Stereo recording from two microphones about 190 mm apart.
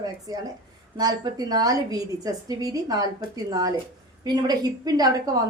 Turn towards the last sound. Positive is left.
turn(degrees=-20)  # may be behind; listen again after turning